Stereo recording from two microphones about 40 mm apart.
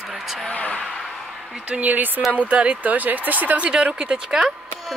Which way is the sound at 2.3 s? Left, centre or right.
Right.